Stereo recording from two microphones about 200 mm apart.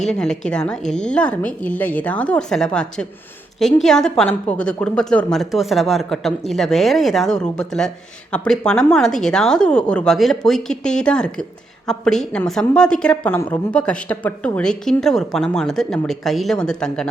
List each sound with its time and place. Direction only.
0.0 s a woman's voice: 5° left (ahead or behind)